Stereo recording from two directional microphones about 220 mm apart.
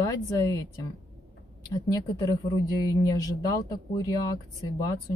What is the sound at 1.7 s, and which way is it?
Speech, 15° left (ahead or behind).